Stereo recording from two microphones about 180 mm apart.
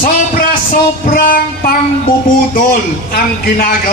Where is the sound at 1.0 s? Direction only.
50° left (ahead or behind).